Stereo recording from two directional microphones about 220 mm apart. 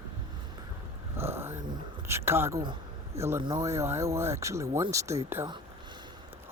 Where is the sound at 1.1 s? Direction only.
10° right (ahead or behind).